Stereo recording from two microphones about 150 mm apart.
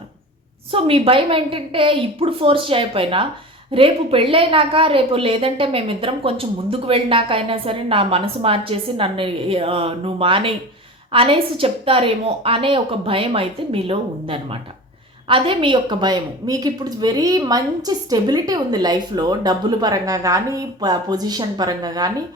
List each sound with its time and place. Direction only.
0.7 s a woman's voice: 40° right (ahead or behind)